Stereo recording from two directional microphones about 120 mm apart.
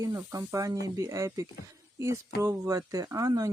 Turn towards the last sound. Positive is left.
turn(degrees=-30)  # may be behind; listen again after turning